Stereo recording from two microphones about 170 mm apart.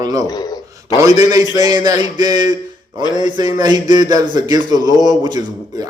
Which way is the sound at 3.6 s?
25° right (ahead or behind).